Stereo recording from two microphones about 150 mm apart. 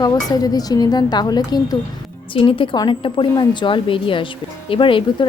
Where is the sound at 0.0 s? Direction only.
25° left (ahead or behind).